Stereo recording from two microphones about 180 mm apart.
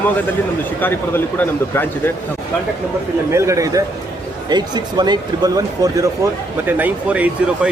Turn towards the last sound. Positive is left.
turn(degrees=-5)  # may be behind; listen again after turning